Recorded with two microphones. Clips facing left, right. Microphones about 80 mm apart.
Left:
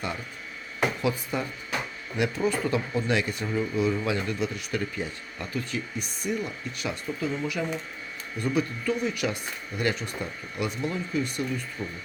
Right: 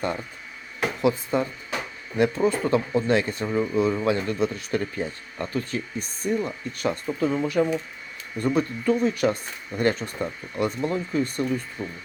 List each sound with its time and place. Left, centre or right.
1.0 s speech: right